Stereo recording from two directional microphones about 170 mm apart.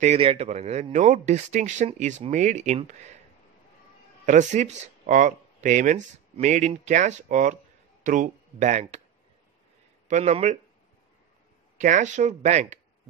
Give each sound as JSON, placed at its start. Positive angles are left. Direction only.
{"t": 0.0, "sound": "a man's voice", "side_deg": -35}
{"t": 4.3, "sound": "speech", "side_deg": -45}
{"t": 10.0, "sound": "speech", "side_deg": -40}
{"t": 11.8, "sound": "speech", "side_deg": -45}